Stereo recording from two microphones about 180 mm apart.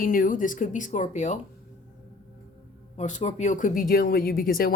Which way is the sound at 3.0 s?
40° left (ahead or behind).